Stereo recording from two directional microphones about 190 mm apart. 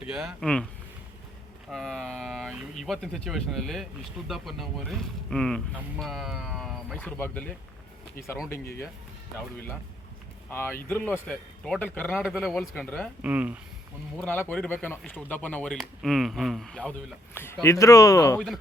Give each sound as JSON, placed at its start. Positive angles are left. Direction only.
{"t": 0.0, "sound": "speech", "side_deg": -5}
{"t": 1.7, "sound": "a sound", "side_deg": 5}
{"t": 2.5, "sound": "speech", "side_deg": -5}
{"t": 9.4, "sound": "speech", "side_deg": 10}
{"t": 13.2, "sound": "speech", "side_deg": -5}
{"t": 14.2, "sound": "speech", "side_deg": 10}